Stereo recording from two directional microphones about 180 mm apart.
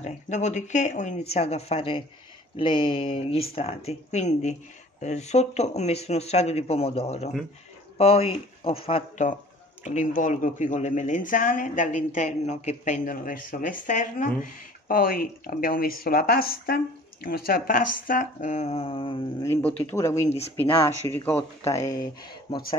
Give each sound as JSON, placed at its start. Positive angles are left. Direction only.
{"t": 0.0, "sound": "speech", "side_deg": 40}
{"t": 9.8, "sound": "speech", "side_deg": 45}
{"t": 19.4, "sound": "speech", "side_deg": 10}
{"t": 20.2, "sound": "speech", "side_deg": 35}
{"t": 20.6, "sound": "speech", "side_deg": 10}